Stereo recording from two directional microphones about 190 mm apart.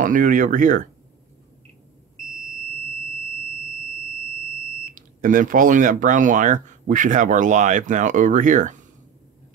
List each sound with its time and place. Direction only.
0.0 s speech: 45° right (ahead or behind)
4.9 s speech: 45° right (ahead or behind)